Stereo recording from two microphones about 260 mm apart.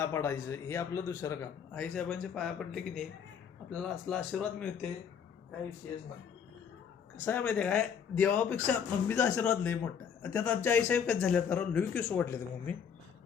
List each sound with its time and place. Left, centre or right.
0.0 s a man's voice: centre
7.3 s a man's voice: centre